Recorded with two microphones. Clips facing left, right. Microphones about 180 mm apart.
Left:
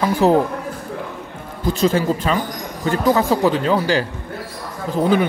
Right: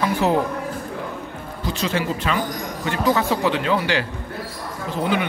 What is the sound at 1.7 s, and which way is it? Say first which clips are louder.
Speech: left 7 dB; 40° left (ahead or behind).